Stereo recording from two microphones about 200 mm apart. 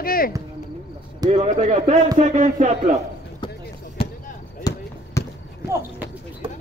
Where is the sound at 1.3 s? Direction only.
35° right (ahead or behind).